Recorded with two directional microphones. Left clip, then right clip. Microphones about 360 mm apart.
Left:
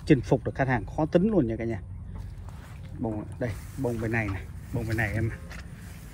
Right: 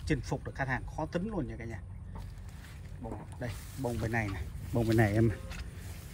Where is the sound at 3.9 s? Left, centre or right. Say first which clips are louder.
Left 5 dB; centre.